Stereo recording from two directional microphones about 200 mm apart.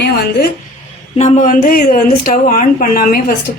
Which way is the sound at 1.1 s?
35° left (ahead or behind).